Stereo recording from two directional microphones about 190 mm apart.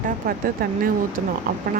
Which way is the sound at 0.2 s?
45° right (ahead or behind).